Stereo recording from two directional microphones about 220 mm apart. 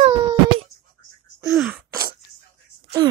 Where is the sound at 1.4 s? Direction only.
Centre (ahead or behind).